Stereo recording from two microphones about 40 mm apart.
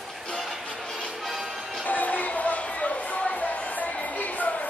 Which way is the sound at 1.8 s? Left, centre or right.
Left.